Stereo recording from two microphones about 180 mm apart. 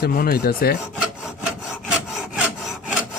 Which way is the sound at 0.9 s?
5° right (ahead or behind).